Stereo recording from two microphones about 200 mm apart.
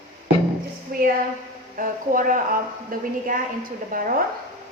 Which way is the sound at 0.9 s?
45° right (ahead or behind).